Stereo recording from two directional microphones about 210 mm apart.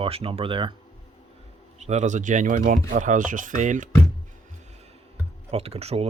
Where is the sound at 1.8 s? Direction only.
35° right (ahead or behind).